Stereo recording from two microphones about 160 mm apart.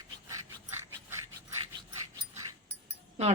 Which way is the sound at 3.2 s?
45° right (ahead or behind).